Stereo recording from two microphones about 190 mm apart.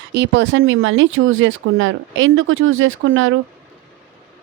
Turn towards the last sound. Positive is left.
turn(degrees=-90)